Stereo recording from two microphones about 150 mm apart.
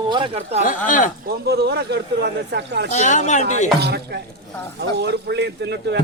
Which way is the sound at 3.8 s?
90° right.